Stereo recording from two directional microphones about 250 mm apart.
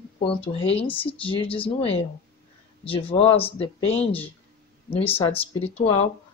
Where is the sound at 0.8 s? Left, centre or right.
Left.